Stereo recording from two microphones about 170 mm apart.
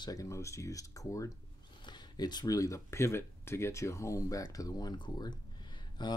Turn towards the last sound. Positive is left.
turn(degrees=25)  # may be behind; listen again after turning